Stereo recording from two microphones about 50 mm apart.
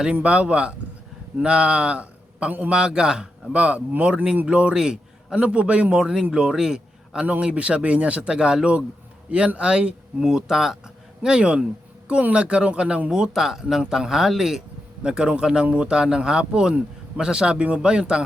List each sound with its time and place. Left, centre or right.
0.1 s a man's voice: right
2.5 s a man's voice: right
2.7 s speech: centre
3.5 s speech: right
4.8 s a sound: centre
5.4 s a man's voice: right; by 14.6 s centre
15.0 s speech: centre